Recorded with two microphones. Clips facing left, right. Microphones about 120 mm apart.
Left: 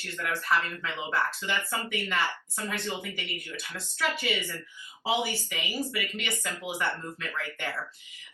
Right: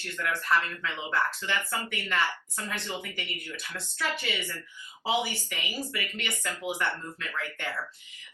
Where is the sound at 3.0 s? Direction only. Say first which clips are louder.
Left 1 dB; 15° left (ahead or behind).